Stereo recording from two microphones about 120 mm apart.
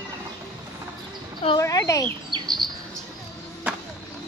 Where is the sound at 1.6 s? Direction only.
30° left (ahead or behind).